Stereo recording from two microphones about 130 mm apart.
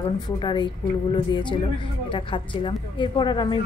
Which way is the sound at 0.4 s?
35° left (ahead or behind).